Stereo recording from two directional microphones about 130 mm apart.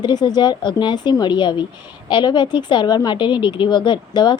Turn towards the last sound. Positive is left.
turn(degrees=35)  # may be behind; listen again after turning